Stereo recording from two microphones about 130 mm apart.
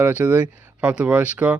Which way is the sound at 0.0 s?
10° right (ahead or behind).